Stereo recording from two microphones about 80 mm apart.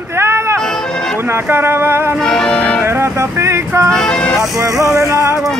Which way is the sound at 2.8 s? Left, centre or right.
Right.